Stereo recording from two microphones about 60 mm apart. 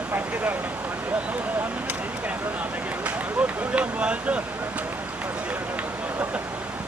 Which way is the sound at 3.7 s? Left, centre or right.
Centre.